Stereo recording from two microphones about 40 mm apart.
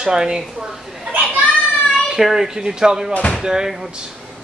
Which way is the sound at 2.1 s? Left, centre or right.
Centre.